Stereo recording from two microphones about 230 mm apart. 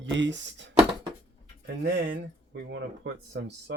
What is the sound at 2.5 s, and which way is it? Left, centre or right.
Speech, right.